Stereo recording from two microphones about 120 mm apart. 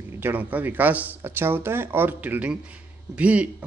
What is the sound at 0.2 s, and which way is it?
A man's voice, 15° right (ahead or behind).